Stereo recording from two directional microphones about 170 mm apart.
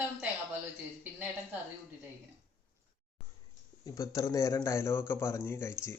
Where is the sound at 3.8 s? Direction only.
20° left (ahead or behind).